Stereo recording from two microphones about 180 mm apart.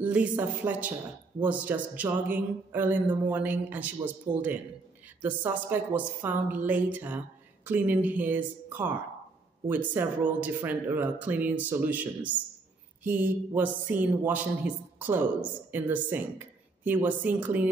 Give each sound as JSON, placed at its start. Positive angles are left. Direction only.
{"t": 0.0, "sound": "speech", "side_deg": -10}